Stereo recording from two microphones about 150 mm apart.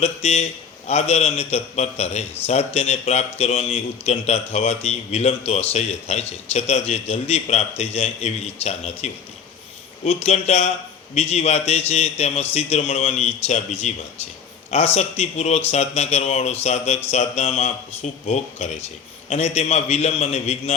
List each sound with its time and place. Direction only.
0.0 s speech: 45° left (ahead or behind)